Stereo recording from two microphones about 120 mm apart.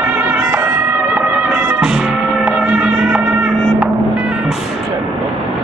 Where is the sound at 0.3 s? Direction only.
15° right (ahead or behind).